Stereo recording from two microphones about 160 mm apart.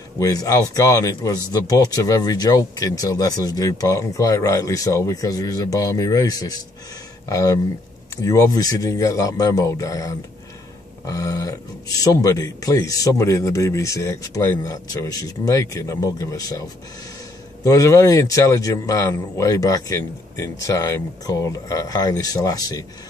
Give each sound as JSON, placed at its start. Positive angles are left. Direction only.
{"t": 0.2, "sound": "speech", "side_deg": 20}
{"t": 17.6, "sound": "speech", "side_deg": 20}